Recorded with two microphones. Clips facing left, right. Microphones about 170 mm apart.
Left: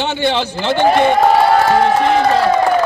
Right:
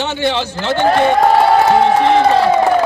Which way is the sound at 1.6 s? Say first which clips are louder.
Right 1 dB; 20° right (ahead or behind).